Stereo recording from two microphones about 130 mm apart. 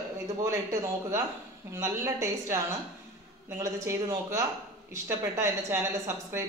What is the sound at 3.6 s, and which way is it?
A woman's voice, 25° right (ahead or behind).